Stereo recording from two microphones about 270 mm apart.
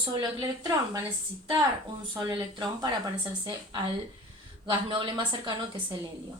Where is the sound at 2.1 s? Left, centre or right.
Centre.